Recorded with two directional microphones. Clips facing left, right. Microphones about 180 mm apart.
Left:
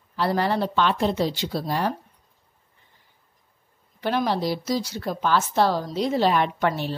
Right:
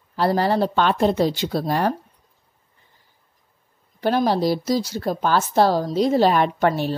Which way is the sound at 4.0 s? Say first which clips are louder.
Right 5 dB; 40° right (ahead or behind).